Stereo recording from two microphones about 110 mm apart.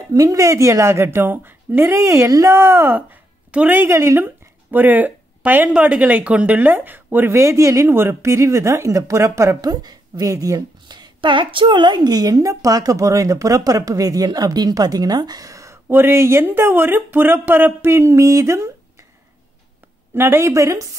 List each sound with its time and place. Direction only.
0.1 s a woman's voice: 30° right (ahead or behind)
20.2 s a woman's voice: 20° right (ahead or behind)